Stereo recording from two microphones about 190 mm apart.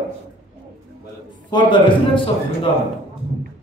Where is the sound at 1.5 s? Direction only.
25° left (ahead or behind).